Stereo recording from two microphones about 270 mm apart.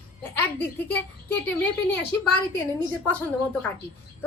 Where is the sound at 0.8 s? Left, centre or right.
Centre.